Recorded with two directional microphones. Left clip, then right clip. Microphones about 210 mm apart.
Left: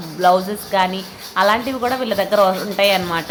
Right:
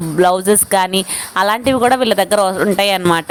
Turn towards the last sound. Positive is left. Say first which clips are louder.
# right 3 dB
turn(degrees=-55)  # may be behind; listen again after turning